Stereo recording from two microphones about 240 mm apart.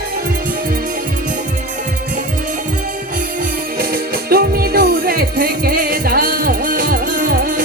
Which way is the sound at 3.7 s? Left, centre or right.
Right.